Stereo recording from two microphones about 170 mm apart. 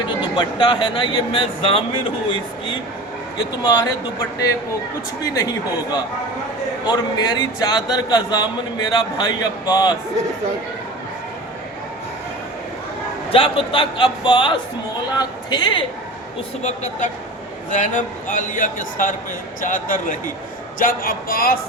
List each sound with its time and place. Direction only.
0.2 s speech: 25° left (ahead or behind)
3.3 s speech: 25° left (ahead or behind)
5.2 s speech: 20° left (ahead or behind)
13.3 s speech: 30° left (ahead or behind)
16.6 s a man's voice: 45° left (ahead or behind); by 21.6 s 60° left (ahead or behind)